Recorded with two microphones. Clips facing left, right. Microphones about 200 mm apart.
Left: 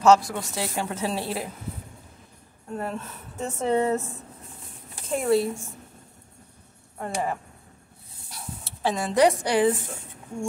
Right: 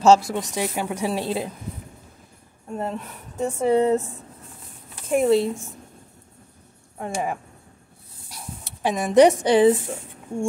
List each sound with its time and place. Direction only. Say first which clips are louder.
0.0 s a woman's voice: right 2 dB; 25° right (ahead or behind)
2.7 s speech: right 2 dB; 15° right (ahead or behind)
5.1 s a woman's voice: right 4 dB; 20° right (ahead or behind)
7.0 s speech: right 1 dB; 15° right (ahead or behind)
8.3 s dog: right 1 dB; 15° right (ahead or behind)
9.4 s a woman's voice: right 6 dB; 20° right (ahead or behind)